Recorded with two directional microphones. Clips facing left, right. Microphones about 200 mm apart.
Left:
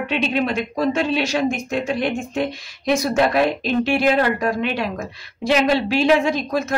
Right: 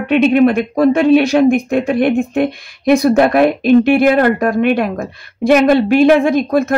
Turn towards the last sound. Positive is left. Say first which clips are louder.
# right 8 dB
turn(degrees=-55)  # may be behind; listen again after turning